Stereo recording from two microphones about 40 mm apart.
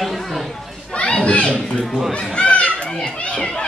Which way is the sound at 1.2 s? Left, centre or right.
Left.